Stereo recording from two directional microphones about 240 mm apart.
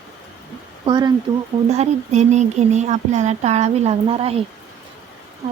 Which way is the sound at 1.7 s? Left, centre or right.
Right.